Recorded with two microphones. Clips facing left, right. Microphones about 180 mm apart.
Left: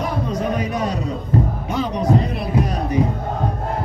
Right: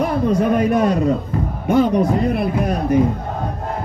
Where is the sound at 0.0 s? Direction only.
55° right (ahead or behind).